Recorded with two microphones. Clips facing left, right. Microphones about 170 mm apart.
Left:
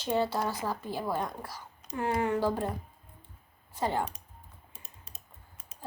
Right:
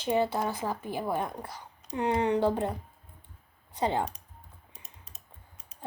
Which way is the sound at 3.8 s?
20° right (ahead or behind).